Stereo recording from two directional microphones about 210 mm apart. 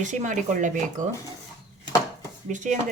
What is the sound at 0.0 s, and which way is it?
Speech, 35° right (ahead or behind).